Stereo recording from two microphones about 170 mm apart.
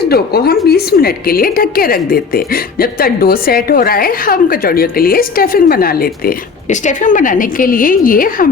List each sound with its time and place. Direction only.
0.0 s a woman's voice: 65° left (ahead or behind)